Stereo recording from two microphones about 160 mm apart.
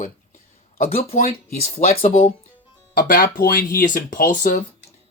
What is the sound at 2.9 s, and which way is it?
Speech, 60° left (ahead or behind).